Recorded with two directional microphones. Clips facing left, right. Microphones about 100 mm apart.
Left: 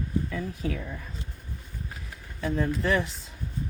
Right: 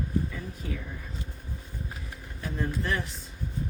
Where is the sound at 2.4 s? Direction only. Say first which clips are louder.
Left 5 dB; 90° left.